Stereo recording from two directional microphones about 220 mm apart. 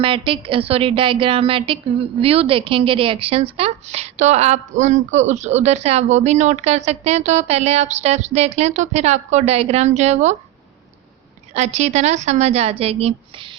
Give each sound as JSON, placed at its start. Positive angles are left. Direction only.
{"t": 0.0, "sound": "a woman's voice", "side_deg": -25}
{"t": 11.5, "sound": "a woman's voice", "side_deg": -30}